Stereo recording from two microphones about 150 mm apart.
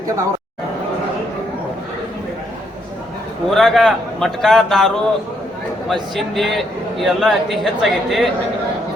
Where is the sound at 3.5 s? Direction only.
Centre (ahead or behind).